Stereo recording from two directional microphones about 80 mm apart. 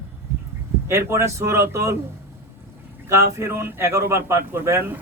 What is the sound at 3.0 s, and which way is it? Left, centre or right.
A man's voice, right.